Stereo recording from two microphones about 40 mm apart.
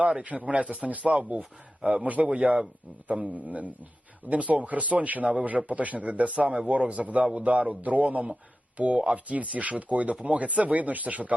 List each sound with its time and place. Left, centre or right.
0.3 s a man's voice: right